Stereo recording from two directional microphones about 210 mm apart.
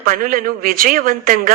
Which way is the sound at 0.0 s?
40° right (ahead or behind).